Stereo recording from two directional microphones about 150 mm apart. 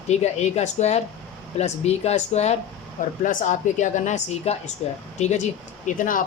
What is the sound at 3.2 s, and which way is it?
Speech, 55° left (ahead or behind).